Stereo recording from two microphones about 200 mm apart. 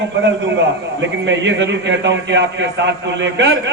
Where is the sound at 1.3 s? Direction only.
65° right (ahead or behind).